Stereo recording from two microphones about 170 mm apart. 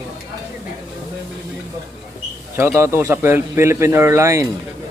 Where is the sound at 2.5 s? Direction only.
15° right (ahead or behind).